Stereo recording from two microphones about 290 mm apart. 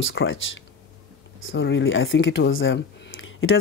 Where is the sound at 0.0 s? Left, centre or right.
Left.